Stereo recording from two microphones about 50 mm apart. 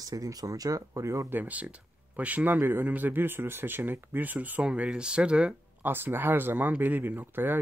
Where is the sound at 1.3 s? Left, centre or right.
Right.